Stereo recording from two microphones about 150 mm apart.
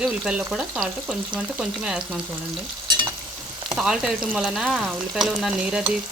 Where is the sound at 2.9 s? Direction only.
30° right (ahead or behind).